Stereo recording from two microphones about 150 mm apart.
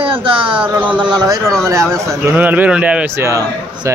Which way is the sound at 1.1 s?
25° right (ahead or behind).